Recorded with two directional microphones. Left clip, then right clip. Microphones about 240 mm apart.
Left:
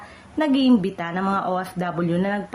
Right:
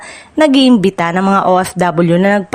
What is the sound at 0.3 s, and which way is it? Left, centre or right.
A woman's voice, right.